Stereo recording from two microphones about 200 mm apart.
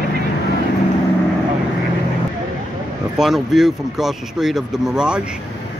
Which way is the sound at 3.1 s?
Centre (ahead or behind).